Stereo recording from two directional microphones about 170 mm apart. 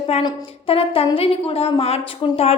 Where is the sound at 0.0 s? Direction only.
35° left (ahead or behind).